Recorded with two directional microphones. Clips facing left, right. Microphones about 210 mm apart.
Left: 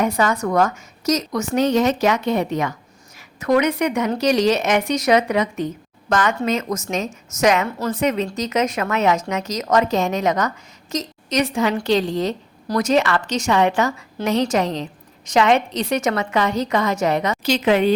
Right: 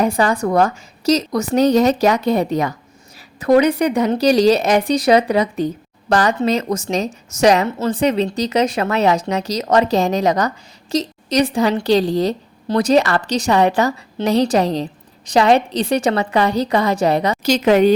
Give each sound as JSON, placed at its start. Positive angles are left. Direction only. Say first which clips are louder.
{"t": 0.0, "sound": "a woman's voice", "louder": "right 3 dB", "side_deg": -35}